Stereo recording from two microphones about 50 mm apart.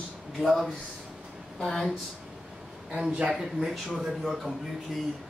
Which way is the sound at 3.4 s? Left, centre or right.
Centre.